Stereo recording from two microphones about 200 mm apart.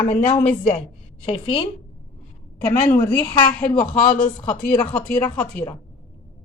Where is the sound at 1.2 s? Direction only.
25° left (ahead or behind).